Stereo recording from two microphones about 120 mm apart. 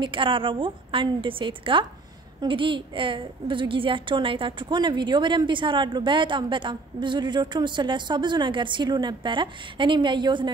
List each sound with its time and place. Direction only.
0.0 s a woman's voice: 45° right (ahead or behind)